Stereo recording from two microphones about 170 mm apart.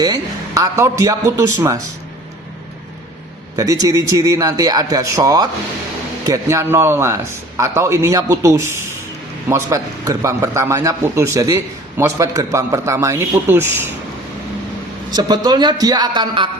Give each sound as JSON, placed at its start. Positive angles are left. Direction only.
{"t": 0.0, "sound": "a man's voice", "side_deg": -20}
{"t": 3.5, "sound": "a man's voice", "side_deg": -20}
{"t": 15.1, "sound": "a man's voice", "side_deg": -25}